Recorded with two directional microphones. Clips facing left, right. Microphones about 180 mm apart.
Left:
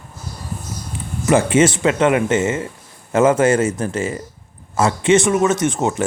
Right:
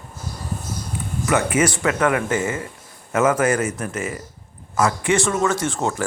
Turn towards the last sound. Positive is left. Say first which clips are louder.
# left 4 dB
turn(degrees=20)  # may be behind; listen again after turning